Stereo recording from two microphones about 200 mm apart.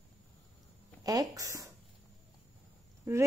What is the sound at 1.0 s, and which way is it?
Speech, 15° right (ahead or behind).